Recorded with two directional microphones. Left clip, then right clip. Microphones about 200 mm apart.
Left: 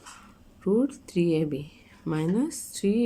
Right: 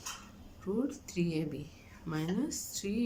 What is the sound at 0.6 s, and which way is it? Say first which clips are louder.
Speech: left 10 dB; 40° left (ahead or behind).